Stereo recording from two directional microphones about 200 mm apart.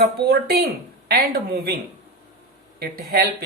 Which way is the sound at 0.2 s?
50° right (ahead or behind).